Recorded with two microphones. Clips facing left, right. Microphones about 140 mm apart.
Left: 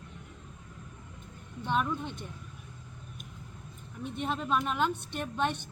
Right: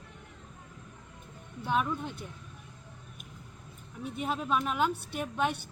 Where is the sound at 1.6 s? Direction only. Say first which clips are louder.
Even; 5° right (ahead or behind).